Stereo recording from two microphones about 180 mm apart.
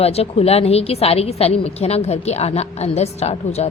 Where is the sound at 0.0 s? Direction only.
35° left (ahead or behind).